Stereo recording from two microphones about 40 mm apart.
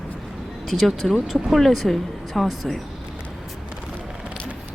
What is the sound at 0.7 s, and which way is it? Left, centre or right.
Speech, centre.